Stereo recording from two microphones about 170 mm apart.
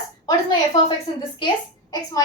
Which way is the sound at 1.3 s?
25° left (ahead or behind).